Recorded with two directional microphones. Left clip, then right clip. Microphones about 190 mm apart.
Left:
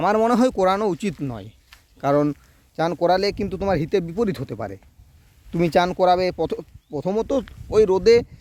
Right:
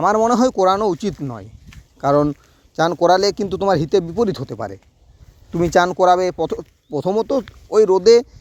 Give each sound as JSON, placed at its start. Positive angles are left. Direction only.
{"t": 0.0, "sound": "speech", "side_deg": -5}
{"t": 1.2, "sound": "speech", "side_deg": 5}
{"t": 6.9, "sound": "speech", "side_deg": -20}